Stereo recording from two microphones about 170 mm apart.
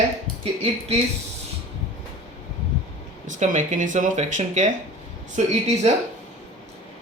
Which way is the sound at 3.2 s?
45° right (ahead or behind).